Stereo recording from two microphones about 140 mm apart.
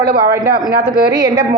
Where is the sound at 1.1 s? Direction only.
30° right (ahead or behind).